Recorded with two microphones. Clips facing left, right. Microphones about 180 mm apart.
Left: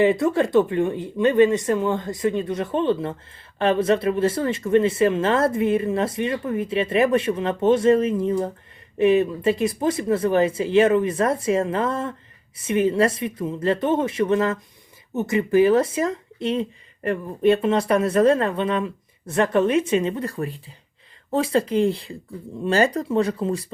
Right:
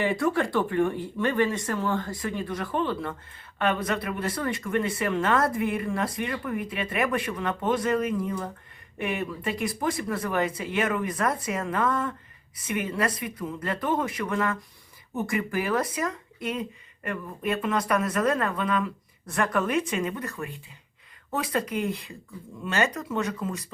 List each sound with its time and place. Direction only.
0.0 s speech: 20° left (ahead or behind)